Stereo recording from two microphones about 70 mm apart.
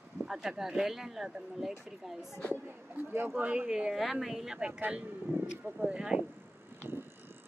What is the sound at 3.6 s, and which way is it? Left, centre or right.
Speech, centre.